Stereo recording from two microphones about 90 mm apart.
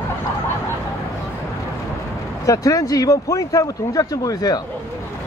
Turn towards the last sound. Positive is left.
turn(degrees=45)  # may be behind; listen again after turning